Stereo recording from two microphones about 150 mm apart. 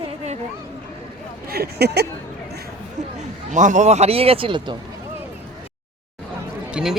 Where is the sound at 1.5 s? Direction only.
90° right.